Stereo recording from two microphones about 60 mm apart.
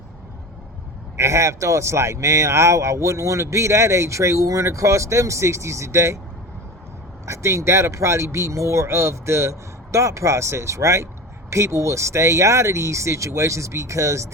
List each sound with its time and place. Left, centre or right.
1.1 s speech: right
7.3 s speech: right